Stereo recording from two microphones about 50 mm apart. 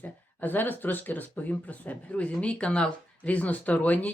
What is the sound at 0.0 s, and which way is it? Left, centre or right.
Speech, left.